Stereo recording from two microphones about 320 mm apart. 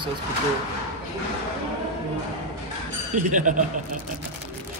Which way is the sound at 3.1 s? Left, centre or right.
Right.